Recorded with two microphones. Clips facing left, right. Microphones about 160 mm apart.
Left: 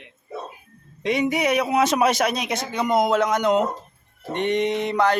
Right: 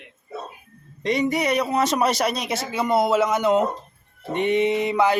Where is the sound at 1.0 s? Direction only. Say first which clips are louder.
Even; centre (ahead or behind).